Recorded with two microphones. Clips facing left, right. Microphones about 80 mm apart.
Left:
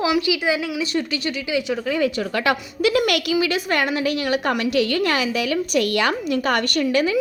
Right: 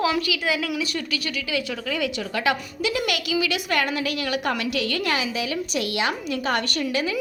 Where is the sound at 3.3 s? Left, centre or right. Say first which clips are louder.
Left 3 dB; left.